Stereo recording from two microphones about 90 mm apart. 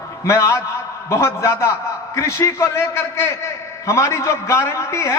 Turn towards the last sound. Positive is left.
turn(degrees=35)  # may be behind; listen again after turning